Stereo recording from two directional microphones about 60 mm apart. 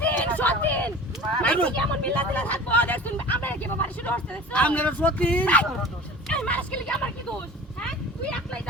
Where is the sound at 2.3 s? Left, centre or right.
Left.